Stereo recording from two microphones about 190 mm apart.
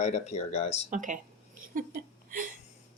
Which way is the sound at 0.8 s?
40° right (ahead or behind).